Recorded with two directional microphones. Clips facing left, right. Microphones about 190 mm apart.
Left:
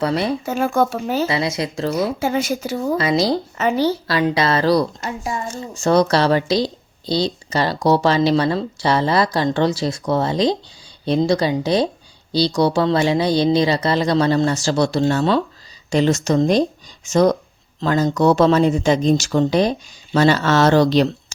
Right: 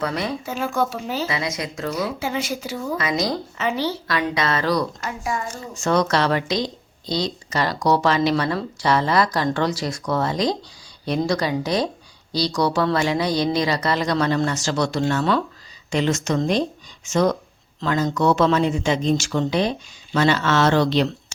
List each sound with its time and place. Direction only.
0.0 s speech: 30° left (ahead or behind)
0.4 s speech: 50° left (ahead or behind)
1.3 s a woman's voice: 30° left (ahead or behind)
1.9 s speech: 45° left (ahead or behind)
3.6 s a woman's voice: 45° left (ahead or behind)